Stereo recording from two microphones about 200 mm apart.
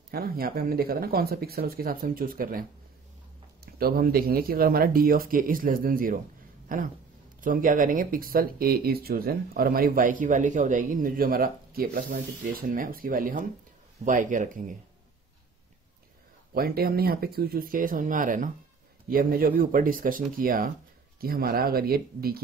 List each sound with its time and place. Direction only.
0.1 s speech: 50° right (ahead or behind)
3.6 s speech: 50° right (ahead or behind)
16.5 s speech: 50° right (ahead or behind)